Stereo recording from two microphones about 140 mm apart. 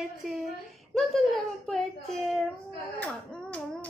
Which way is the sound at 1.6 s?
Centre (ahead or behind).